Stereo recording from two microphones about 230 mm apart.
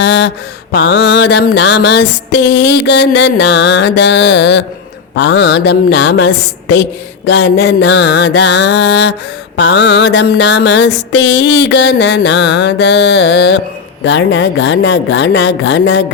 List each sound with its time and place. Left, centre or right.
0.0 s mantra: left